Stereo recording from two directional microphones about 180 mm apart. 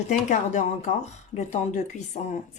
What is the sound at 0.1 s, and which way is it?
Speech, 45° left (ahead or behind).